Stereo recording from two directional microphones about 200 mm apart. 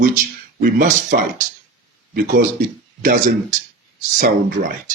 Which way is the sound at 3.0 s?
40° right (ahead or behind).